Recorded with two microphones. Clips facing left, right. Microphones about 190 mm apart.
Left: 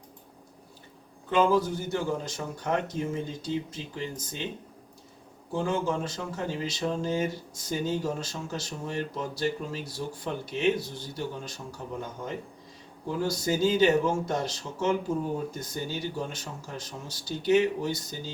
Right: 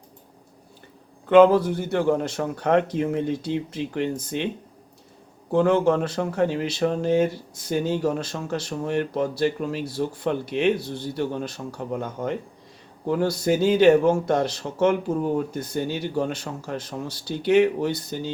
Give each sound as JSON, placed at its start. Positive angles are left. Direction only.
{"t": 1.3, "sound": "speech", "side_deg": -65}
{"t": 5.5, "sound": "speech", "side_deg": -65}